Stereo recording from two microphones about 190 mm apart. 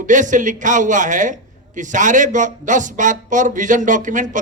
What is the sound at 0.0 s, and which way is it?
A man's voice, 40° right (ahead or behind).